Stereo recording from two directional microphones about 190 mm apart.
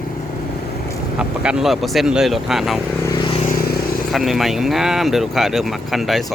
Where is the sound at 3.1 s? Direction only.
25° left (ahead or behind).